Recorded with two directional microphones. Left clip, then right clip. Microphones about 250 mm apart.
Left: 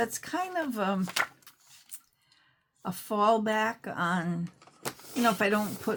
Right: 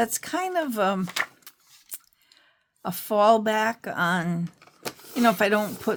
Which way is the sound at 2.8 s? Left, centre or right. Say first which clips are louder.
Right 6 dB; right.